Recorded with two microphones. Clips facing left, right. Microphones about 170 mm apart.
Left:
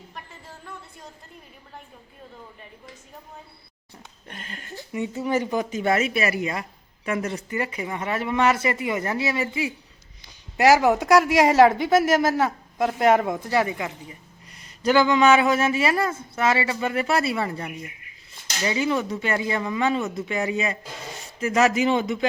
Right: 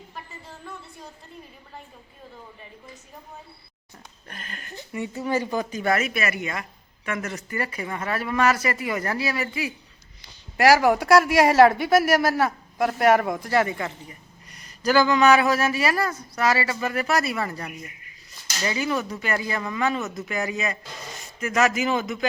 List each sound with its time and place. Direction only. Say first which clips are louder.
0.1 s a sound: right 1 dB; centre (ahead or behind)
4.3 s speech: left 2 dB; 25° left (ahead or behind)
7.5 s a woman's voice: right 1 dB; 20° left (ahead or behind)
14.5 s speech: left 1 dB; 25° left (ahead or behind)